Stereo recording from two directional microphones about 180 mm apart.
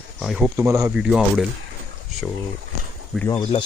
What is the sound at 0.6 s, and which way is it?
Speech, 15° right (ahead or behind).